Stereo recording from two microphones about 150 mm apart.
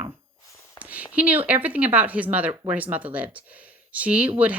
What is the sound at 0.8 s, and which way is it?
Speech, 10° right (ahead or behind).